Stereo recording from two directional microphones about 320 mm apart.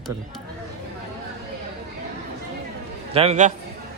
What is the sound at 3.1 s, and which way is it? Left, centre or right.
Speech, right.